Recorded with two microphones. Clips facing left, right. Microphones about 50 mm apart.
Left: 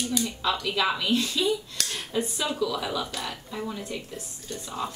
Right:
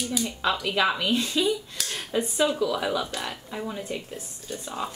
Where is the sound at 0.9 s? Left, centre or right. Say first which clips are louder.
Right 1 dB; right.